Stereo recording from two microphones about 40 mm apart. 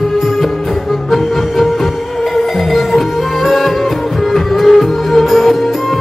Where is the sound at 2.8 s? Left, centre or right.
Centre.